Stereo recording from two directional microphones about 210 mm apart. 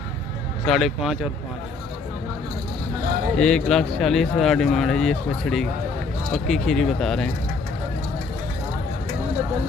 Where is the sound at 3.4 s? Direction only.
5° left (ahead or behind).